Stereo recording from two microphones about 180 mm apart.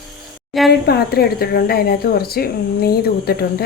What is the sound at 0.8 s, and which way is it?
Speech, 60° left (ahead or behind).